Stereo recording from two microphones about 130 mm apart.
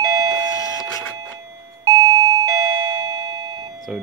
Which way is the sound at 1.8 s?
25° right (ahead or behind).